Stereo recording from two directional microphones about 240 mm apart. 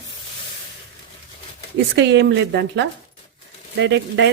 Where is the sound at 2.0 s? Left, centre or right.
Right.